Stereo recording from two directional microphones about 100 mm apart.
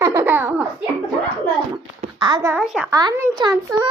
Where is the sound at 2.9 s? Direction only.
45° right (ahead or behind).